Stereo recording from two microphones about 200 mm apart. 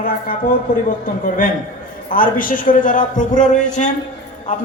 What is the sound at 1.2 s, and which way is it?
A man's voice, 45° left (ahead or behind).